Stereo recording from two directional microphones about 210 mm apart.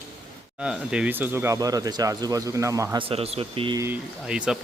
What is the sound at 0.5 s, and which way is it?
Speech, 5° right (ahead or behind).